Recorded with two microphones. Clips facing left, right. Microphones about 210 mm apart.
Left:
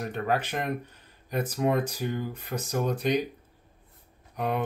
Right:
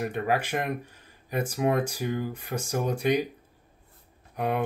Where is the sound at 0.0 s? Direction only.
10° right (ahead or behind).